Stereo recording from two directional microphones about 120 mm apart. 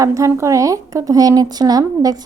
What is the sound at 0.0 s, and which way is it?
Speech, 25° right (ahead or behind).